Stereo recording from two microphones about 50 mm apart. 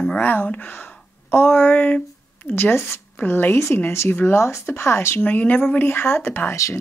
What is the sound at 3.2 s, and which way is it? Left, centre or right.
Speech, left.